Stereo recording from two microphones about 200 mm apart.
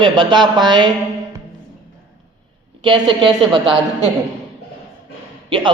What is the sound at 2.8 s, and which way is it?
A man's voice, 25° right (ahead or behind).